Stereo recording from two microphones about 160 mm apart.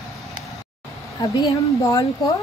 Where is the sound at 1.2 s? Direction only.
20° left (ahead or behind).